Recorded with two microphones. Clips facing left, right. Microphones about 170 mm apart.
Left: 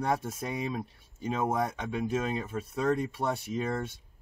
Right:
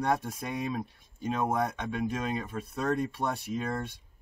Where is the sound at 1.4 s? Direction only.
5° left (ahead or behind).